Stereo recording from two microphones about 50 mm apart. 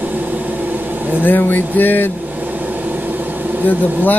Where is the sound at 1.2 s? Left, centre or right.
Left.